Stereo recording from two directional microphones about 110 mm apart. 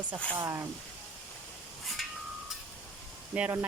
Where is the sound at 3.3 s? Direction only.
10° right (ahead or behind).